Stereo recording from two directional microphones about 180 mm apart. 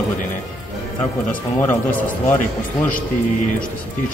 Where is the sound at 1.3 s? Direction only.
10° left (ahead or behind).